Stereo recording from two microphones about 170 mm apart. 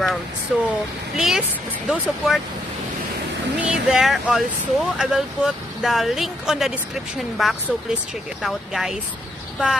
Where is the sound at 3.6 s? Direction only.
5° right (ahead or behind).